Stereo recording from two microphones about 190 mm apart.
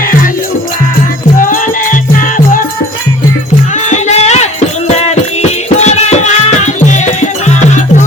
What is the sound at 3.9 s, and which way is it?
Music, 35° left (ahead or behind).